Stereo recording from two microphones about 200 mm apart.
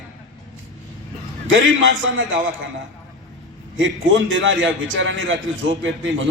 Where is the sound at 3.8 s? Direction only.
70° right (ahead or behind).